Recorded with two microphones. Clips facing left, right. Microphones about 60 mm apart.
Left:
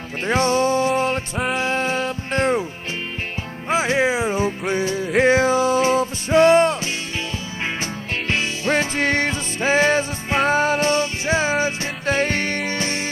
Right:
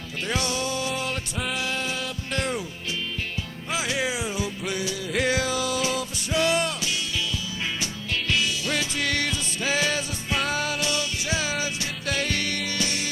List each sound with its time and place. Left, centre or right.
0.3 s music: left
3.7 s music: left
8.3 s music: left